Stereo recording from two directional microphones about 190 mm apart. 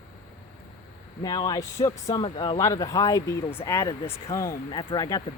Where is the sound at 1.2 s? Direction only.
20° left (ahead or behind).